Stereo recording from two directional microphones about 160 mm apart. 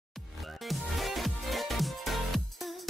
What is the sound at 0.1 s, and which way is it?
Music, centre (ahead or behind).